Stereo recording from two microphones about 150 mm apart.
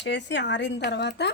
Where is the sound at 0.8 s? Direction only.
90° left.